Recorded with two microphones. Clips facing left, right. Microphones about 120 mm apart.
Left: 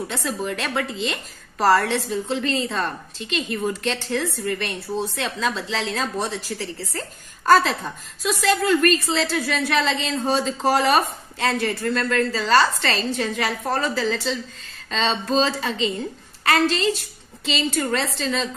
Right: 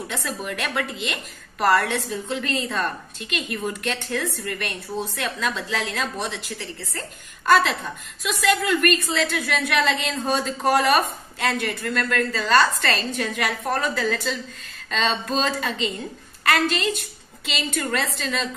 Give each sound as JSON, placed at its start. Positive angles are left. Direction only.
{"t": 0.1, "sound": "a woman's voice", "side_deg": 25}